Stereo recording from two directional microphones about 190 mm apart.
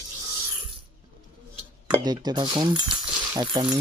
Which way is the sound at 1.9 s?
20° right (ahead or behind).